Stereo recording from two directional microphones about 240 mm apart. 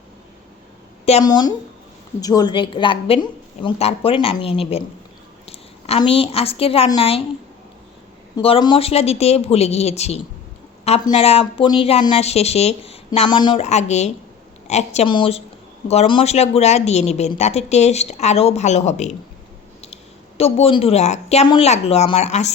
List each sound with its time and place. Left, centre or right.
1.0 s a woman's voice: left
8.4 s speech: left
20.4 s speech: left